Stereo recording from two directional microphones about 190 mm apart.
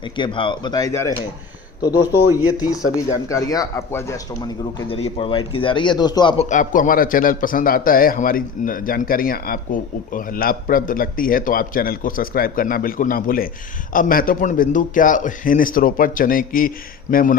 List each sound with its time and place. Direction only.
0.0 s a man's voice: 25° left (ahead or behind)
2.5 s a man's voice: 20° left (ahead or behind)
4.9 s a man's voice: 30° left (ahead or behind)
6.4 s a man's voice: 40° left (ahead or behind)